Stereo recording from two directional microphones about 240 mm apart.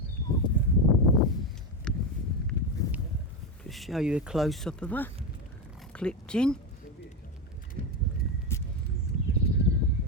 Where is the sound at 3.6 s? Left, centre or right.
Centre.